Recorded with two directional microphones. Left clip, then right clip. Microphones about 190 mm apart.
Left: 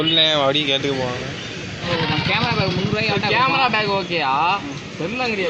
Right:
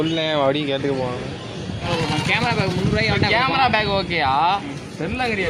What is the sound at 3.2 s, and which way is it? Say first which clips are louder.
Speech: left 1 dB; 20° right (ahead or behind).